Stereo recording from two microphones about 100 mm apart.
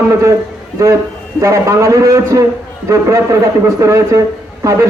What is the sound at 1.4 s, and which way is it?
A man's voice, 30° right (ahead or behind).